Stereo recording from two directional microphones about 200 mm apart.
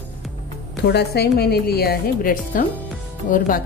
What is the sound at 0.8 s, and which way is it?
A woman's voice, 55° left (ahead or behind).